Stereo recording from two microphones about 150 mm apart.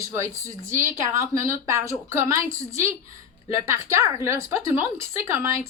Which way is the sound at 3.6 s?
20° right (ahead or behind).